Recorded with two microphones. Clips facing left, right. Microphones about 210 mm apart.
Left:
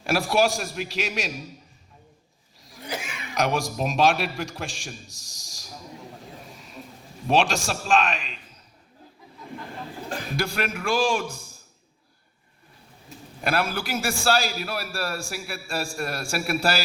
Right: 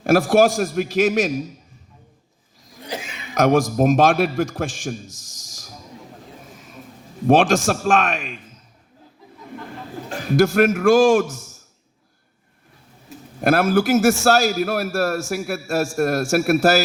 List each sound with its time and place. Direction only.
0.0 s a man's voice: 50° right (ahead or behind)
2.8 s a sound: 25° right (ahead or behind)
3.3 s a man's voice: 50° right (ahead or behind)
7.3 s a man's voice: 50° right (ahead or behind)
10.3 s a man's voice: 50° right (ahead or behind)
13.4 s a man's voice: 50° right (ahead or behind)